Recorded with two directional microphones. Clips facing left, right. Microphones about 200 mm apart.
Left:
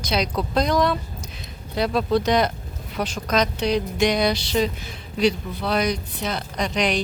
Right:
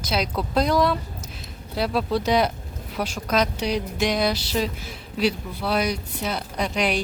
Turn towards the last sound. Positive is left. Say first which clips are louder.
# left 1 dB
turn(degrees=-5)  # may be behind; listen again after turning